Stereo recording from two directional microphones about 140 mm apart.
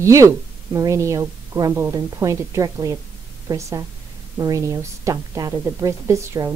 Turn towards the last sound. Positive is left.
turn(degrees=-20)  # may be behind; listen again after turning